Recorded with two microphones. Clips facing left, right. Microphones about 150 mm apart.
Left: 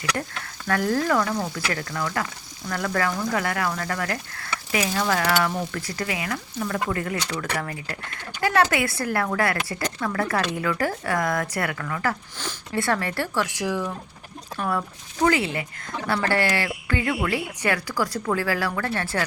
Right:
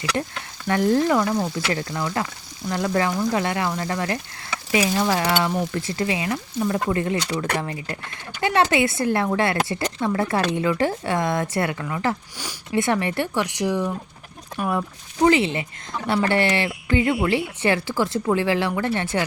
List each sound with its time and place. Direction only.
0.7 s speech: 25° right (ahead or behind)